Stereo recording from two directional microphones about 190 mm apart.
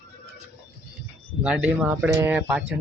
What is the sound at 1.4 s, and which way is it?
Speech, 5° right (ahead or behind).